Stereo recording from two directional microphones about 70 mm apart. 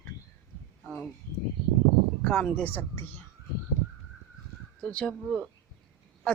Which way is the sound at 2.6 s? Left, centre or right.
Left.